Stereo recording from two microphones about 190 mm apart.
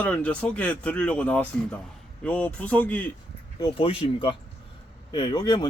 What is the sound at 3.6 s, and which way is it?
Speech, 30° left (ahead or behind).